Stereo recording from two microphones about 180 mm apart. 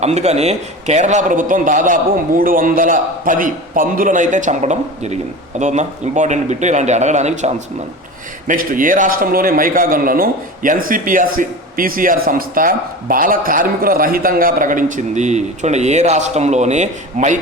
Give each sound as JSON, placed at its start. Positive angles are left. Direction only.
{"t": 0.0, "sound": "a man's voice", "side_deg": -35}